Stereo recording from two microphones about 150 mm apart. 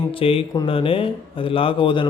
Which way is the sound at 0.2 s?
40° left (ahead or behind).